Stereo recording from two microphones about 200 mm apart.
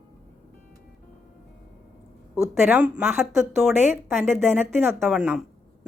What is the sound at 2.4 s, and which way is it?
A woman's voice, 10° right (ahead or behind).